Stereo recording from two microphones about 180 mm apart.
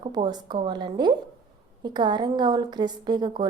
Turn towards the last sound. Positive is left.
turn(degrees=-25)  # may be behind; listen again after turning